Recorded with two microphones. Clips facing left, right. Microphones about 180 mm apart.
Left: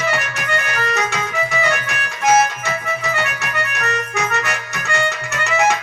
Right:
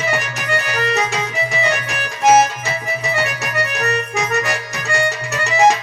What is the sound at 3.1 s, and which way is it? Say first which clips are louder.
Accordion: right 2 dB; 35° right (ahead or behind).